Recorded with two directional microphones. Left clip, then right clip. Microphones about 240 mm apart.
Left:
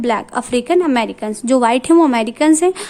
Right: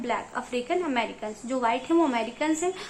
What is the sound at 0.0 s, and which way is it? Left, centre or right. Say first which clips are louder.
A woman's voice: left 11 dB; left.